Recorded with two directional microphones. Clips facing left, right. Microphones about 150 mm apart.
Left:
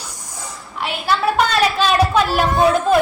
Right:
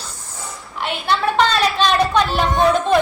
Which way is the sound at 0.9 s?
Centre (ahead or behind).